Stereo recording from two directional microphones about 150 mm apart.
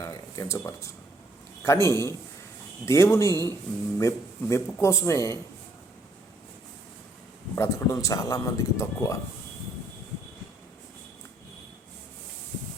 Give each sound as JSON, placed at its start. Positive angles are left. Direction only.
{"t": 0.0, "sound": "a man's voice", "side_deg": 20}
{"t": 7.5, "sound": "a man's voice", "side_deg": 20}